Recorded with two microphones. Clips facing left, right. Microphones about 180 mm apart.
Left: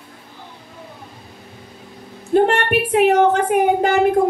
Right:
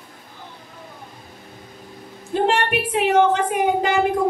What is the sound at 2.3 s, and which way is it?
A woman's voice, 55° left (ahead or behind).